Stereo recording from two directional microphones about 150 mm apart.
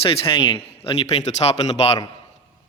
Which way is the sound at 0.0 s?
35° left (ahead or behind).